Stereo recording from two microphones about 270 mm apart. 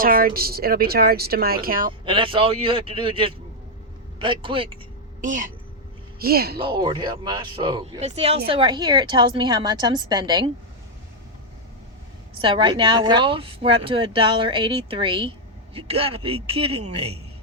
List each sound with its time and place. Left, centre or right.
0.0 s speech: right
1.9 s speech: centre; by 6.6 s right
6.6 s a woman's voice: centre
12.4 s speech: centre